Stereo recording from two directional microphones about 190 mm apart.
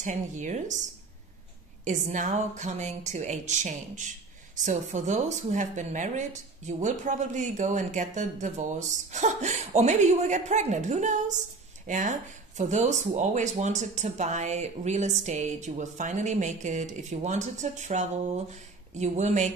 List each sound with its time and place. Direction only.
0.0 s speech: 40° right (ahead or behind)
1.9 s speech: 40° right (ahead or behind)